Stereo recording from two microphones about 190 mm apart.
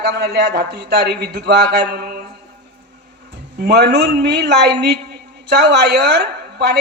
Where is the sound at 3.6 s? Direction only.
60° right (ahead or behind).